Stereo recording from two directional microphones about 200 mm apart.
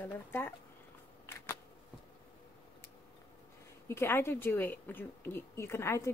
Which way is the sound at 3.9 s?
10° left (ahead or behind).